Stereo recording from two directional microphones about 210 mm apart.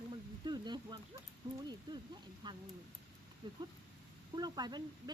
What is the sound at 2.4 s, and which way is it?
Speech, 20° right (ahead or behind).